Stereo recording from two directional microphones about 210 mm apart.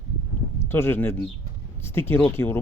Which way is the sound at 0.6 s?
10° left (ahead or behind).